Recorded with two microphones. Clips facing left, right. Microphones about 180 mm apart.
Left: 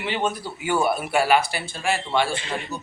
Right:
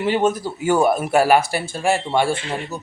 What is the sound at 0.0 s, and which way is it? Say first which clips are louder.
A man's voice: right 7 dB; 45° right (ahead or behind).